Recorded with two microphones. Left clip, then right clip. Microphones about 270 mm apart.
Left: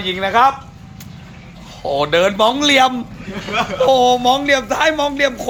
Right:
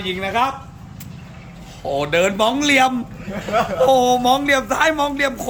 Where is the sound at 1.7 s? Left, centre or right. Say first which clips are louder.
Left 4 dB; centre.